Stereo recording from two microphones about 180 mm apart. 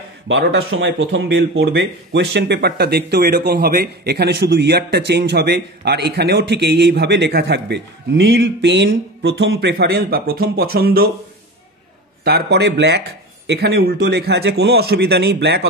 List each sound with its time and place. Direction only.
0.3 s speech: 70° right (ahead or behind)
12.3 s a man's voice: 60° right (ahead or behind)